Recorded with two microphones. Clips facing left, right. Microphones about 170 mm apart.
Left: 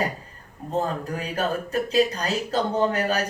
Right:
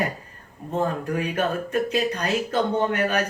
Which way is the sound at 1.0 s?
35° left (ahead or behind).